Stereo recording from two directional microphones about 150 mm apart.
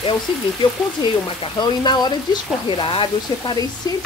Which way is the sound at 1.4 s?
30° left (ahead or behind).